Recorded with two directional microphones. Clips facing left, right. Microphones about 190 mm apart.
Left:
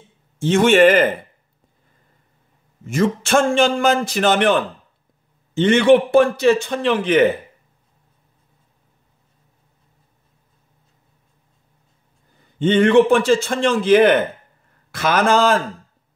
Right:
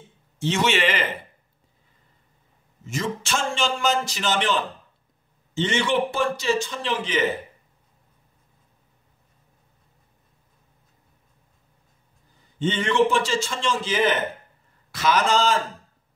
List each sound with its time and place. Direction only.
0.4 s a man's voice: 50° left (ahead or behind)
2.8 s a man's voice: 55° left (ahead or behind)
12.5 s a man's voice: 60° left (ahead or behind)